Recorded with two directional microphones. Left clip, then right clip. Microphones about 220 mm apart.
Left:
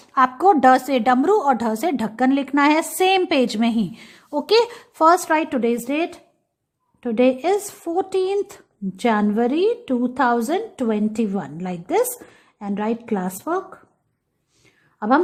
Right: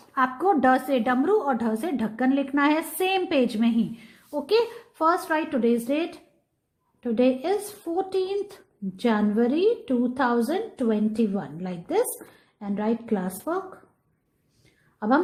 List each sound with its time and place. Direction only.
0.1 s a woman's voice: 25° left (ahead or behind)
14.9 s a woman's voice: 20° left (ahead or behind)